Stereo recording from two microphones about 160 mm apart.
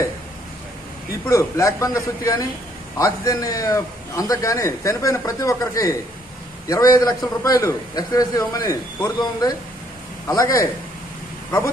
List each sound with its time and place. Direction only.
1.2 s a man's voice: 20° left (ahead or behind)